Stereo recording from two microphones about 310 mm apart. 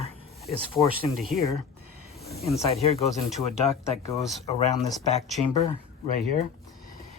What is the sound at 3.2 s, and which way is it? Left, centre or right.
Speech, centre.